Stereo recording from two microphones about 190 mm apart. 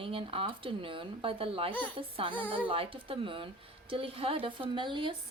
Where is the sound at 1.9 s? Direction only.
30° right (ahead or behind).